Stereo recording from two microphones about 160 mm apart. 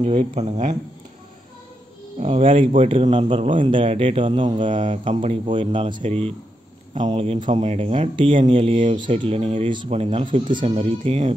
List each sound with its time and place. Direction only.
0.0 s speech: 45° right (ahead or behind)
2.1 s speech: 40° right (ahead or behind)